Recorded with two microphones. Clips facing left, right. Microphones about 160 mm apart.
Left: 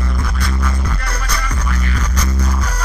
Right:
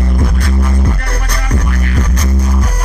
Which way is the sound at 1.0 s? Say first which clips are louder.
Right 3 dB; 55° right (ahead or behind).